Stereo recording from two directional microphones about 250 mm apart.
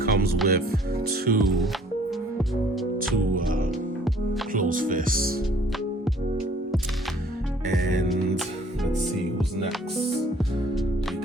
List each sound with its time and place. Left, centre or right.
0.0 s music: right
1.4 s speech: centre
3.3 s speech: right